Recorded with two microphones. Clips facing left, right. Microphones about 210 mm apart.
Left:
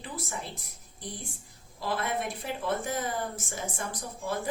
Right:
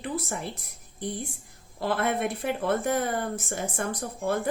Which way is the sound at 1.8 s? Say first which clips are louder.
Right 5 dB; 60° right (ahead or behind).